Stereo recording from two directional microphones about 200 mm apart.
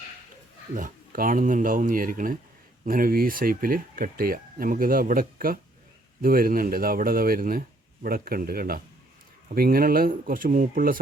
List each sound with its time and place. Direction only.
0.8 s speech: 45° right (ahead or behind)